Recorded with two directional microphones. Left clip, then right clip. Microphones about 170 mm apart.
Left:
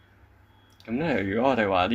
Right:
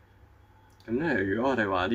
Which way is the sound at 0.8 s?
15° left (ahead or behind).